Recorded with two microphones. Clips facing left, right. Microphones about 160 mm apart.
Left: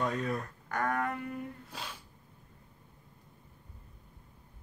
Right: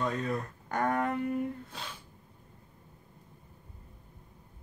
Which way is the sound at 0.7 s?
25° right (ahead or behind).